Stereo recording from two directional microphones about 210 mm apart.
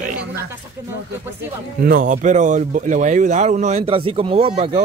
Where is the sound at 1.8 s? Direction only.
40° right (ahead or behind).